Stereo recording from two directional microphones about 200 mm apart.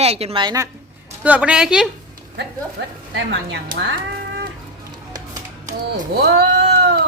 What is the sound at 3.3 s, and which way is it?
Speech, 55° right (ahead or behind).